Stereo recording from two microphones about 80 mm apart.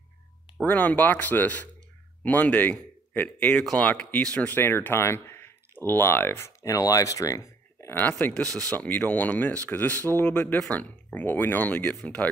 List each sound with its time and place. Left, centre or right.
0.7 s speech: left
8.3 s speech: centre
8.7 s speech: left